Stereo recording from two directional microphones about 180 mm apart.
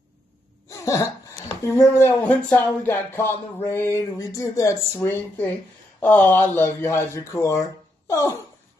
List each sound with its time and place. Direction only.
0.7 s speech: 15° left (ahead or behind)